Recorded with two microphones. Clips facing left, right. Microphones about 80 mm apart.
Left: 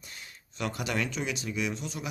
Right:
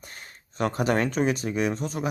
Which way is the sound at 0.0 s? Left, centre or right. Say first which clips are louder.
Right 3 dB; right.